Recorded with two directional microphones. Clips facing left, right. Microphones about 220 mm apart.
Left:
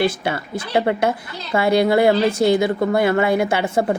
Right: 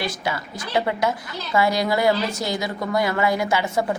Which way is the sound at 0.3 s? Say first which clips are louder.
Left 4 dB; 55° left (ahead or behind).